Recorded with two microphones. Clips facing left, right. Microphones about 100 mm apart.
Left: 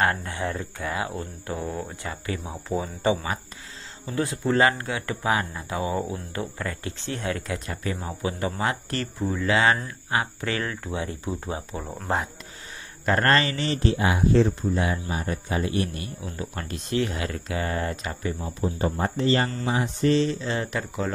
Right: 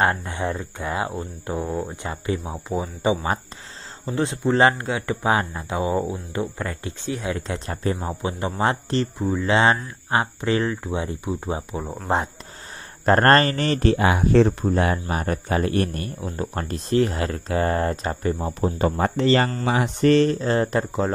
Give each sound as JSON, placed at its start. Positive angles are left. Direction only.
{"t": 0.0, "sound": "speech", "side_deg": -20}
{"t": 11.8, "sound": "speech", "side_deg": -5}
{"t": 13.0, "sound": "speech", "side_deg": -45}
{"t": 18.4, "sound": "speech", "side_deg": -75}
{"t": 20.3, "sound": "speech", "side_deg": -40}